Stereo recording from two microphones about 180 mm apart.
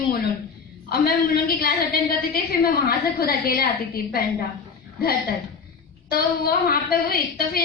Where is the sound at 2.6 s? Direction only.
55° left (ahead or behind).